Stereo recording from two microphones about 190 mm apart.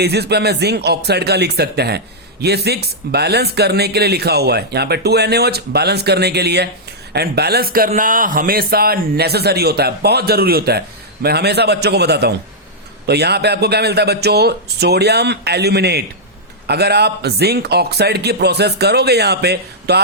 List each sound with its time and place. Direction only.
0.0 s a man's voice: 60° right (ahead or behind)